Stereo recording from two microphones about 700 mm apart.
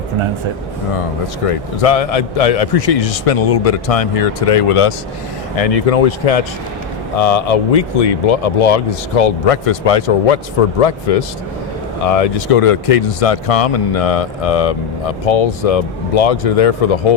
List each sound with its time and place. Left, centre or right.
1.5 s speech: left